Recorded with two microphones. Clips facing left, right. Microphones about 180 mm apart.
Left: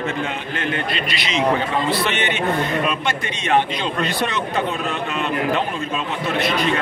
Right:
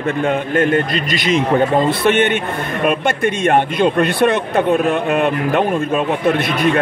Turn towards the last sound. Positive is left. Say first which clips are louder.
# right 5 dB
turn(degrees=-55)  # may be behind; listen again after turning